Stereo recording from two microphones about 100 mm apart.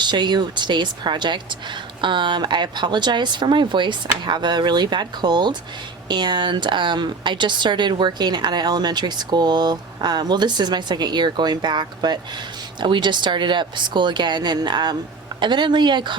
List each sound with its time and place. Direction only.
0.0 s speech: 50° right (ahead or behind)